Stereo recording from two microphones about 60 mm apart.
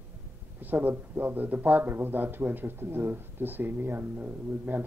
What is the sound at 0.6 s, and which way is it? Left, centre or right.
Speech, right.